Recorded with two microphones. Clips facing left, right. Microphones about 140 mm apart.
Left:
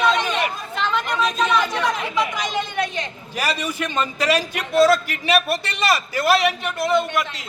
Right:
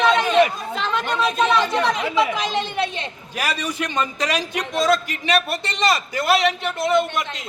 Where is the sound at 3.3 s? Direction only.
10° right (ahead or behind).